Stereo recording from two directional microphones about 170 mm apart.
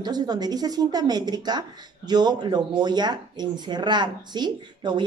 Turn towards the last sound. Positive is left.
turn(degrees=-25)  # may be behind; listen again after turning